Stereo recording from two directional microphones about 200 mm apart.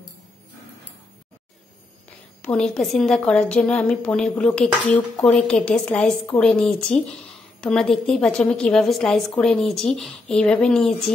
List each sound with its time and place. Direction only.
2.4 s a woman's voice: 5° left (ahead or behind)